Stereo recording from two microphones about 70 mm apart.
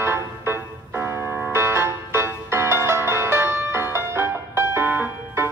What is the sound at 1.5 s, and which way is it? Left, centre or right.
Music, right.